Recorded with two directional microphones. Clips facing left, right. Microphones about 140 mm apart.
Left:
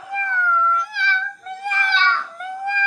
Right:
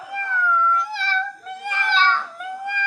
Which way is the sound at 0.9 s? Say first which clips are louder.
Left 1 dB; 35° right (ahead or behind).